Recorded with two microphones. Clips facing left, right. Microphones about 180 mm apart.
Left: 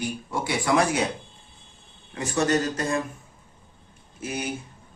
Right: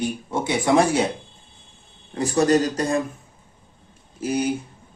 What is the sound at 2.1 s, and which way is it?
Speech, 35° right (ahead or behind).